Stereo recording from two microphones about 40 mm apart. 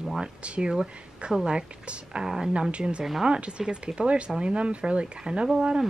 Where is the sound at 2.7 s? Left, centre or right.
Right.